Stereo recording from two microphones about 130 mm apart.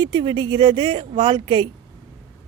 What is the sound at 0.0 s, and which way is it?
Speech, 35° right (ahead or behind).